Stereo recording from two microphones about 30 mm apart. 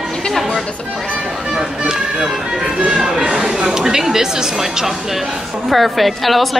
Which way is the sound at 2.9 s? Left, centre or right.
Right.